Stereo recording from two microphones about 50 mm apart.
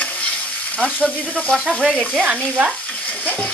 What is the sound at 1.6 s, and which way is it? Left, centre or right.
Sizzle, centre.